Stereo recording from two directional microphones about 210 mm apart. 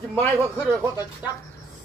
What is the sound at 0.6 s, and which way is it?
Speech, 10° right (ahead or behind).